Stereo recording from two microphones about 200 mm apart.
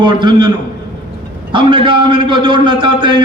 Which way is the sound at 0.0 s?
20° right (ahead or behind).